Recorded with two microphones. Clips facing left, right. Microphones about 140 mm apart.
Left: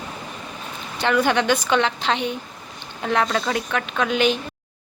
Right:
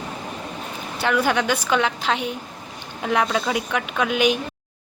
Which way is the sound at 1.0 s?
5° right (ahead or behind).